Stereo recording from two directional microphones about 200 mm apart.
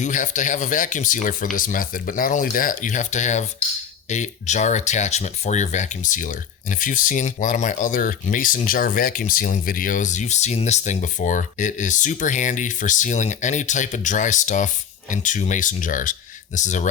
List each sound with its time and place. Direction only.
0.0 s speech: 40° left (ahead or behind)